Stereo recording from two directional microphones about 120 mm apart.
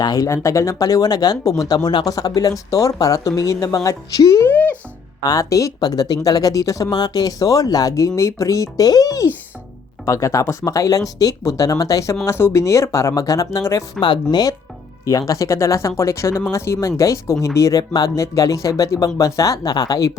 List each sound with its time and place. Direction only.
0.0 s speech: 30° left (ahead or behind)
4.5 s music: 15° left (ahead or behind)
5.2 s speech: 30° left (ahead or behind)
14.0 s speech: 40° left (ahead or behind)
15.3 s speech: 25° left (ahead or behind)